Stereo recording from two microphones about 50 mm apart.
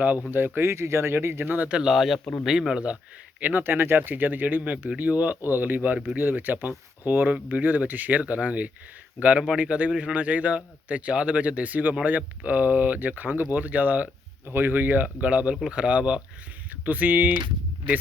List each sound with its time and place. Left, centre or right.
0.3 s speech: right
1.5 s speech: right
1.9 s speech: centre
3.4 s speech: right
14.4 s speech: right
16.8 s speech: right